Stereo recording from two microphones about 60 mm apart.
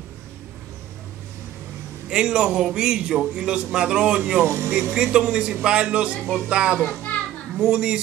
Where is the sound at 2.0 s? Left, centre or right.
Centre.